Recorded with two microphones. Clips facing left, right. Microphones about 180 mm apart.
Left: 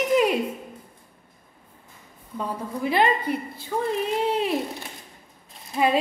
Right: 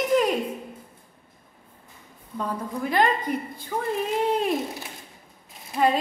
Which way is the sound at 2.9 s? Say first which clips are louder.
Left 1 dB; 10° left (ahead or behind).